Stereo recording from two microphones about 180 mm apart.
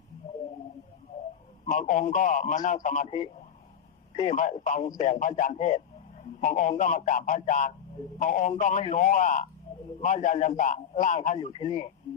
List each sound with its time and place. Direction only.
1.6 s a man's voice: 45° left (ahead or behind)
4.1 s a man's voice: 40° left (ahead or behind)
11.4 s speech: 30° left (ahead or behind)